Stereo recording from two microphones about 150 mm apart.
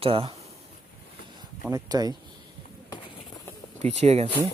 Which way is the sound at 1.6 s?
25° right (ahead or behind).